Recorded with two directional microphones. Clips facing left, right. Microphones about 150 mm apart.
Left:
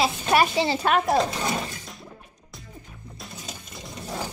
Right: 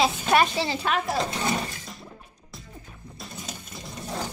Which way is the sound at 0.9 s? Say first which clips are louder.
Left 5 dB; 50° left (ahead or behind).